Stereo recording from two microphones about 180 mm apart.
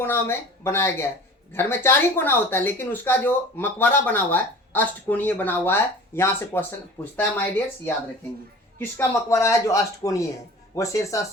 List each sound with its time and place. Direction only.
0.0 s speech: 10° left (ahead or behind)
8.8 s speech: 15° left (ahead or behind)